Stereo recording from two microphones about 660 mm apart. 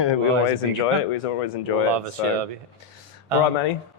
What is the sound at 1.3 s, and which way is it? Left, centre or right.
Speech, left.